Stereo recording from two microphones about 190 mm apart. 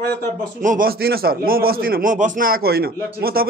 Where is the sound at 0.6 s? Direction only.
45° right (ahead or behind).